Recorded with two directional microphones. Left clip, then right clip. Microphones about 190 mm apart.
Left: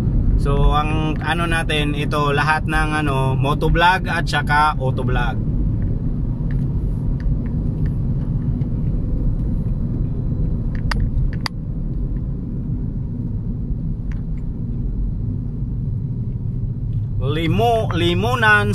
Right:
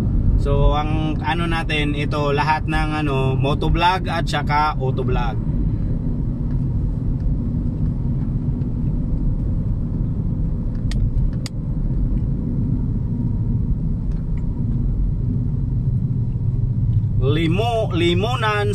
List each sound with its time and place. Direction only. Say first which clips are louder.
0.5 s speech: left 1 dB; 25° left (ahead or behind)
17.3 s speech: left 3 dB; 25° left (ahead or behind)